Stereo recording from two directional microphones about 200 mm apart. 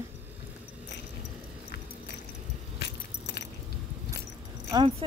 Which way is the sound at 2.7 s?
55° left (ahead or behind).